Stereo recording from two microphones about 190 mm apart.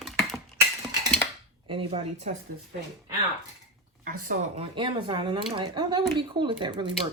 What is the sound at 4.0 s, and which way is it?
Speech, 50° right (ahead or behind).